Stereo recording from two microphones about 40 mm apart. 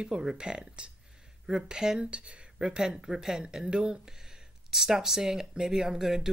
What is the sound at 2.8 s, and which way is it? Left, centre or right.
Speech, centre.